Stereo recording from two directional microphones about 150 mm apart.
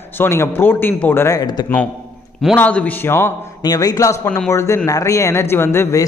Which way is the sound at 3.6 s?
25° left (ahead or behind).